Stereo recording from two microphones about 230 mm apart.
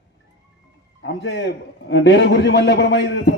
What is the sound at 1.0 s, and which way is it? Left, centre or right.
A man's voice, left.